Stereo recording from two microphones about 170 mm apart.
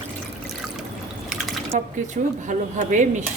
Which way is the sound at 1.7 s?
45° right (ahead or behind).